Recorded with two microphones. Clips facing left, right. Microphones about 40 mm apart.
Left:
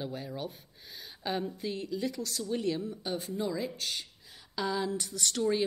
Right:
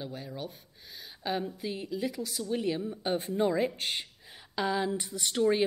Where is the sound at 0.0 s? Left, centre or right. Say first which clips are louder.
Left 1 dB; centre.